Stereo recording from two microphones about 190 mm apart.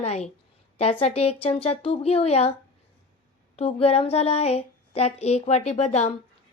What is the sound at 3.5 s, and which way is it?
A woman's voice, 30° left (ahead or behind).